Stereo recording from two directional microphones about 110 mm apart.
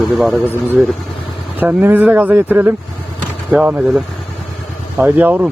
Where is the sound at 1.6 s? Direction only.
15° right (ahead or behind).